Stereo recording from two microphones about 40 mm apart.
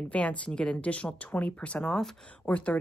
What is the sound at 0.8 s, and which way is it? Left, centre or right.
Speech, left.